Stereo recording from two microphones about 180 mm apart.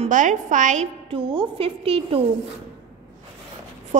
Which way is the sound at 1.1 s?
30° right (ahead or behind).